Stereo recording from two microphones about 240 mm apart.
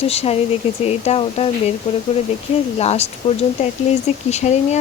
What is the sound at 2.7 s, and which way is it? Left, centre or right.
Speech, left.